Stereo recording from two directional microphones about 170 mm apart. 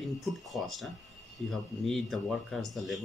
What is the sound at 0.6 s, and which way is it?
Speech, centre (ahead or behind).